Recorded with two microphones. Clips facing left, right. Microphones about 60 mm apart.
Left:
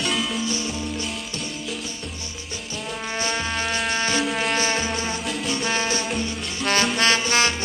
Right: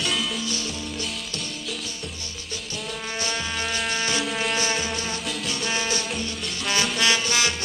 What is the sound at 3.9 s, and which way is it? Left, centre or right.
Music, left.